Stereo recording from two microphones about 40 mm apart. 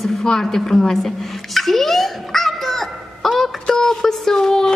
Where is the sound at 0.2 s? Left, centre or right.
Centre.